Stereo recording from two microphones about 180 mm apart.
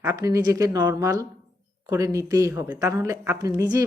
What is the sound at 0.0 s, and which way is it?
Speech, 15° right (ahead or behind).